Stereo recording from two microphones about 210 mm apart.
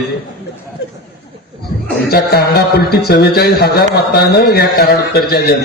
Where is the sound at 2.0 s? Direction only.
50° left (ahead or behind).